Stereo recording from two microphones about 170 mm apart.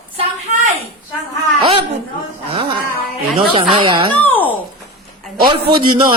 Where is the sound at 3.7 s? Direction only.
30° right (ahead or behind).